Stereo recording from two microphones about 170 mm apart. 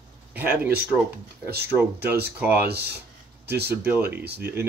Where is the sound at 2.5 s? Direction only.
70° right (ahead or behind).